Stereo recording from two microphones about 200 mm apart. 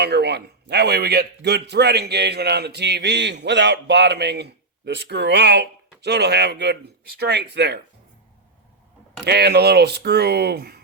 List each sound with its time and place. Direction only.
0.0 s a man's voice: 55° right (ahead or behind)
9.2 s a man's voice: 55° right (ahead or behind)